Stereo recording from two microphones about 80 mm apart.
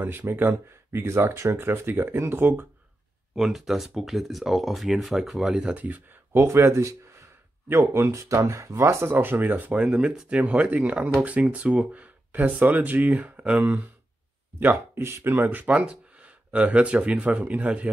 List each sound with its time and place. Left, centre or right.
0.0 s speech: right
3.3 s speech: centre; by 6.4 s right
6.4 s speech: right; by 17.9 s centre